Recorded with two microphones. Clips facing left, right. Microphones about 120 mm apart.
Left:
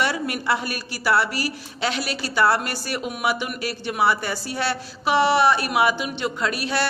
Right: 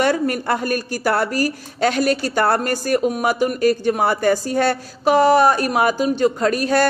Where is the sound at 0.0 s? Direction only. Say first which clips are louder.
Right 6 dB; 45° right (ahead or behind).